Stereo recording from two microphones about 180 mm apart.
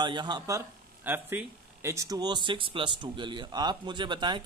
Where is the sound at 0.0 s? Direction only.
25° right (ahead or behind).